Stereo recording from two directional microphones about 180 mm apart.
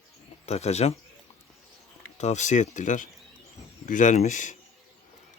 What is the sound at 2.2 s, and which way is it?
Speech, 40° left (ahead or behind).